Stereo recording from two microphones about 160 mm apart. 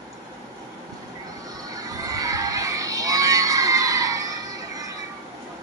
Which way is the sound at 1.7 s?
20° right (ahead or behind).